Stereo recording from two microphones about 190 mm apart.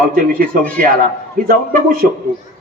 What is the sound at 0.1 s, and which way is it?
Speech, 50° right (ahead or behind).